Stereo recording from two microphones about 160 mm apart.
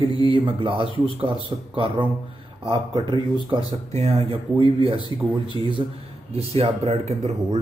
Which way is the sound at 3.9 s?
40° right (ahead or behind).